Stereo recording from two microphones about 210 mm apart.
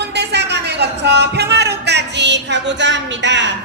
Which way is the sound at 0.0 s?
55° right (ahead or behind).